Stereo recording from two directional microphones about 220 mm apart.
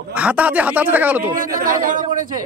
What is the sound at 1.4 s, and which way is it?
Speech, 40° right (ahead or behind).